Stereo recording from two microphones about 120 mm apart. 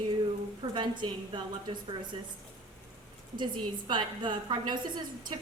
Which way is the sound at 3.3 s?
40° right (ahead or behind).